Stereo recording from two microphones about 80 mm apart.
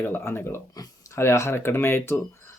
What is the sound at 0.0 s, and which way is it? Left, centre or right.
Speech, left.